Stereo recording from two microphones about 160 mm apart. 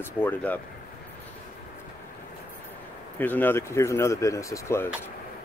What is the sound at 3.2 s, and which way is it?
Speech, 10° left (ahead or behind).